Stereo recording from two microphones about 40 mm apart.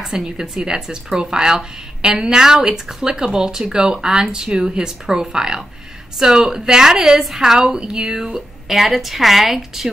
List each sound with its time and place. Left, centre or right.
0.1 s speech: centre